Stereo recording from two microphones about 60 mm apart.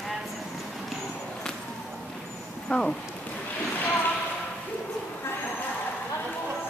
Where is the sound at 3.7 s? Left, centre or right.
Left.